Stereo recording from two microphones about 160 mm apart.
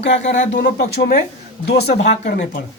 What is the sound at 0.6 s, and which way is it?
Speech, 80° left.